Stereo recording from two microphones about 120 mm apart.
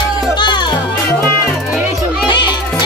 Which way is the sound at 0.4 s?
40° left (ahead or behind).